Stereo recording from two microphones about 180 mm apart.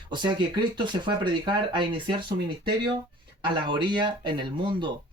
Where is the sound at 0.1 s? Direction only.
25° right (ahead or behind).